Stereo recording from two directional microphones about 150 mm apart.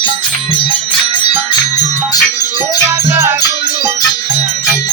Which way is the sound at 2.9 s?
15° right (ahead or behind).